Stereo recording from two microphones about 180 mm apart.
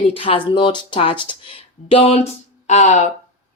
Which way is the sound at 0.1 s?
30° left (ahead or behind).